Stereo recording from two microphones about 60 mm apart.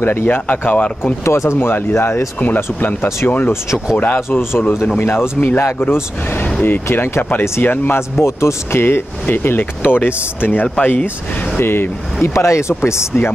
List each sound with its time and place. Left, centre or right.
0.0 s speech: left
0.5 s speech: left
1.2 s speech: left
2.4 s speech: left
7.9 s speech: left
8.8 s speech: left
12.4 s speech: left